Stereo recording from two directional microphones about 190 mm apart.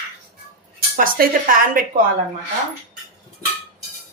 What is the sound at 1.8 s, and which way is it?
Speech, 45° right (ahead or behind).